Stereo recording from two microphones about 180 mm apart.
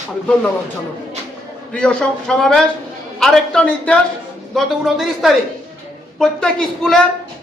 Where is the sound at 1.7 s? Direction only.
5° left (ahead or behind).